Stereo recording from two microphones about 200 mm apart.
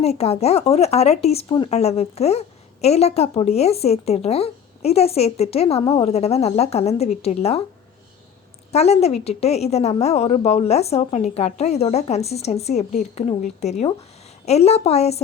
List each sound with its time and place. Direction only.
0.0 s a woman's voice: 30° left (ahead or behind)
8.7 s a woman's voice: 30° left (ahead or behind)